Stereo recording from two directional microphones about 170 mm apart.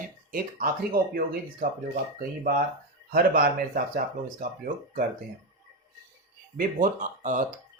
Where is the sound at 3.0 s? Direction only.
60° right (ahead or behind).